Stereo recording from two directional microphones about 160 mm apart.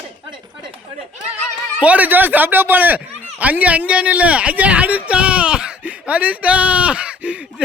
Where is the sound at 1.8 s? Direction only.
10° right (ahead or behind).